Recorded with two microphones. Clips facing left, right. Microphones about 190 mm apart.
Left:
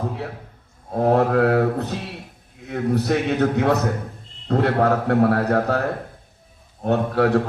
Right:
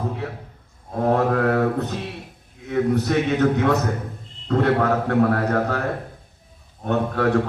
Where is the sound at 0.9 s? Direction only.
35° left (ahead or behind).